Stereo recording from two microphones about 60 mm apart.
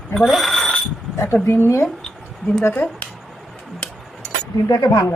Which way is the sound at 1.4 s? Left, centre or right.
Left.